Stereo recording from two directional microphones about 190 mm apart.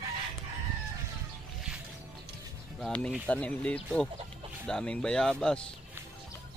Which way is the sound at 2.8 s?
5° left (ahead or behind).